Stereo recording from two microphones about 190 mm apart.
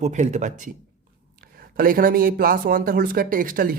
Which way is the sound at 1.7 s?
45° right (ahead or behind).